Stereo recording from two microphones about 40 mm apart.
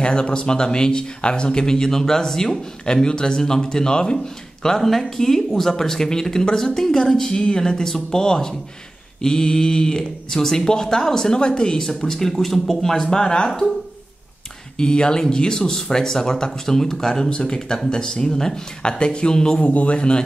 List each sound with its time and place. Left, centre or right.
0.0 s speech: left
4.6 s speech: centre
14.8 s speech: left
19.6 s speech: left